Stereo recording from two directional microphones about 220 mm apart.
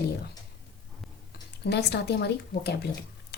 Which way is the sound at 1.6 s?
50° left (ahead or behind).